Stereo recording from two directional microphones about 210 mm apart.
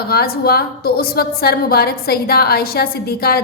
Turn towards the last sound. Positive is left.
turn(degrees=45)  # may be behind; listen again after turning